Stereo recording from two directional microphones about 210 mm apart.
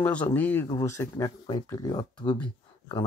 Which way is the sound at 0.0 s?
5° left (ahead or behind).